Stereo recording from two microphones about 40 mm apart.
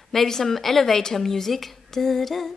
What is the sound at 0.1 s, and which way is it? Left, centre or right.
Speech, centre.